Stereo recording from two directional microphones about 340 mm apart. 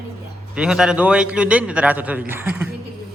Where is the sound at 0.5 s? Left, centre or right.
Centre.